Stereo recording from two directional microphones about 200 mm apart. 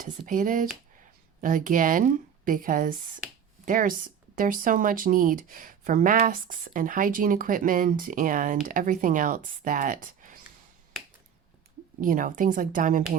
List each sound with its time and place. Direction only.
0.0 s a woman's voice: 40° right (ahead or behind)
11.9 s a woman's voice: 40° right (ahead or behind)